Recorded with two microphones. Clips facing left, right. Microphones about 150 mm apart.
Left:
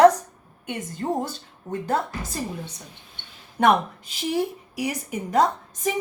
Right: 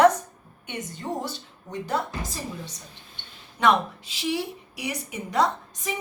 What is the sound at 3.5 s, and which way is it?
A woman's voice, 50° left (ahead or behind).